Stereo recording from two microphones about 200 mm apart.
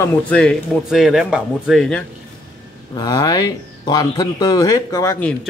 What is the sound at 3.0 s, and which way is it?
Speech, 20° left (ahead or behind).